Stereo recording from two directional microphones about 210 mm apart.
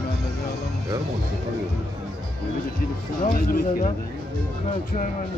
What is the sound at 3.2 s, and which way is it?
Speech, 40° left (ahead or behind).